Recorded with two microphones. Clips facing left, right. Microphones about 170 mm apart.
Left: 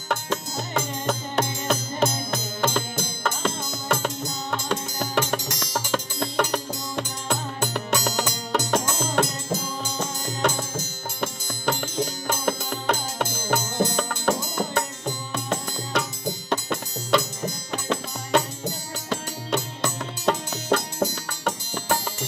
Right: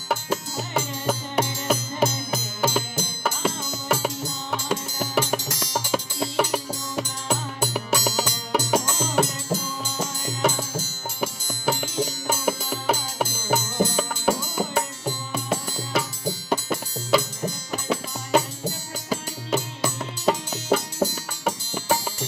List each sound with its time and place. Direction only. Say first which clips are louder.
0.1 s music: right 1 dB; 10° right (ahead or behind)